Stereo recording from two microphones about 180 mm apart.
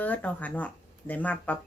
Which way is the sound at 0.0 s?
10° left (ahead or behind).